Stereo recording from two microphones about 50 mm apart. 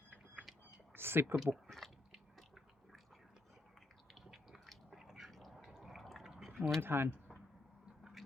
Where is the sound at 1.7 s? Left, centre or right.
Centre.